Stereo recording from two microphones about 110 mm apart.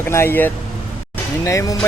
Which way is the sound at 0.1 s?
20° left (ahead or behind).